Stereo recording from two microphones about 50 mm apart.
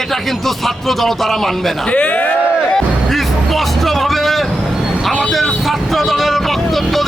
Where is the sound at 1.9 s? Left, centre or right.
Left.